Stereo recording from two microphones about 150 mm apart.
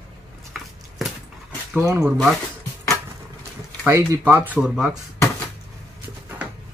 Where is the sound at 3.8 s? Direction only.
15° right (ahead or behind).